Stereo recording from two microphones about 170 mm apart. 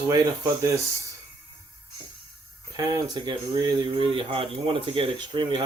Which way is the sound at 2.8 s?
20° right (ahead or behind).